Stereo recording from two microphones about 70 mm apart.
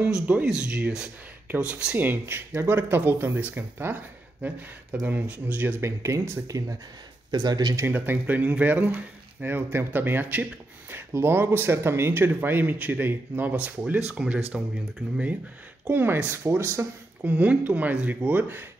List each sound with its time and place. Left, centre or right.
0.5 s speech: centre
2.0 s speech: right
7.2 s speech: right
7.8 s speech: right
15.9 s speech: right
17.2 s speech: right